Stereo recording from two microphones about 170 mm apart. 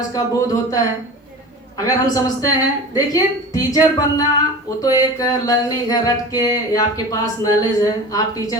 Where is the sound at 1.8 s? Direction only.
20° left (ahead or behind).